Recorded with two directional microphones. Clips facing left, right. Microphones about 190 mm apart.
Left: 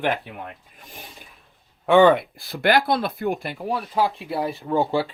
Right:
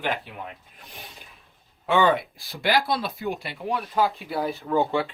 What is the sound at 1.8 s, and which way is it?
Speech, 55° left (ahead or behind).